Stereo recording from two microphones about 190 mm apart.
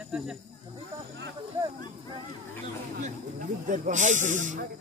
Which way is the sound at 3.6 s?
40° right (ahead or behind).